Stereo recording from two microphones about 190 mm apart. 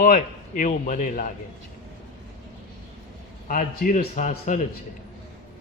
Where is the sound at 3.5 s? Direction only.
45° left (ahead or behind).